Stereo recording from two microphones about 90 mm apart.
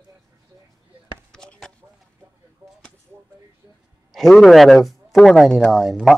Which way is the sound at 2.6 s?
20° right (ahead or behind).